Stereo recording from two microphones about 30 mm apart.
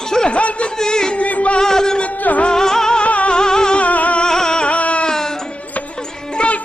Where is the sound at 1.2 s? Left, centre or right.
Left.